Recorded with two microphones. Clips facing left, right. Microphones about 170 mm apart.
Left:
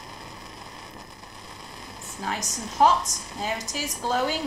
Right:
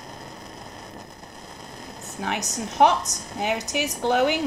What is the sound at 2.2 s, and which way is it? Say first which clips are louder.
A woman's voice: right 3 dB; 70° right (ahead or behind).